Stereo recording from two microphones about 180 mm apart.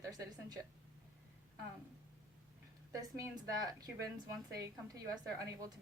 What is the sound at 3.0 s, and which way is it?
A woman's voice, 20° right (ahead or behind).